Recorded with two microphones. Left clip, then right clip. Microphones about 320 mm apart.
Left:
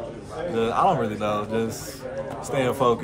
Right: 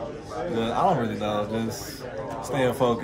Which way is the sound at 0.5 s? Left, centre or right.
Centre.